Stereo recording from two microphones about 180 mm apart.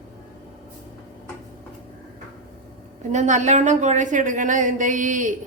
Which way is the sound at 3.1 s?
40° right (ahead or behind).